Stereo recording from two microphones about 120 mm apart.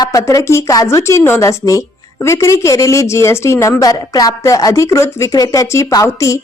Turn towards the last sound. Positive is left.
turn(degrees=25)  # may be behind; listen again after turning